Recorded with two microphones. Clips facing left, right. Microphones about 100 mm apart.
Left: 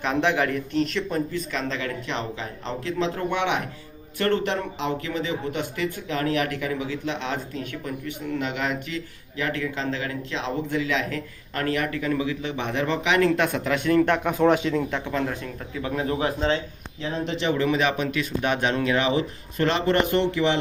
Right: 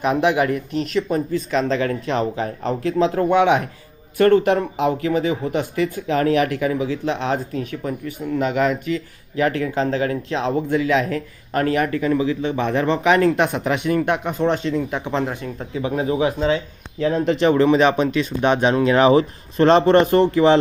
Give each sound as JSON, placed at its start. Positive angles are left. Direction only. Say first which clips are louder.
{"t": 0.0, "sound": "speech", "louder": "right 5 dB", "side_deg": -15}
{"t": 1.3, "sound": "speech", "louder": "right 8 dB", "side_deg": -35}
{"t": 12.5, "sound": "speech", "louder": "right 5 dB", "side_deg": -45}
{"t": 13.3, "sound": "speech", "louder": "right 3 dB", "side_deg": -20}
{"t": 14.3, "sound": "speech", "louder": "even", "side_deg": 0}
{"t": 14.8, "sound": "speech", "louder": "right 3 dB", "side_deg": -15}
{"t": 17.2, "sound": "speech", "louder": "right 8 dB", "side_deg": -45}
{"t": 18.9, "sound": "speech", "louder": "right 8 dB", "side_deg": -40}